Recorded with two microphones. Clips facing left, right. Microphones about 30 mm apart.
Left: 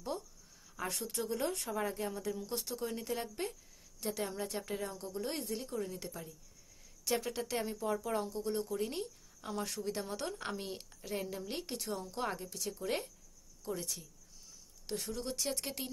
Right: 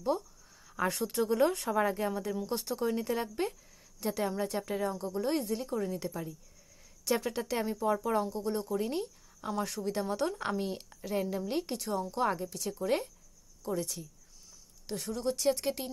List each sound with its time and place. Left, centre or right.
1.0 s speech: right
2.5 s speech: centre